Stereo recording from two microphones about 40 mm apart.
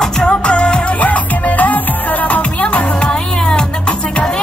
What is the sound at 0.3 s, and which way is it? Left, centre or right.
Music, left.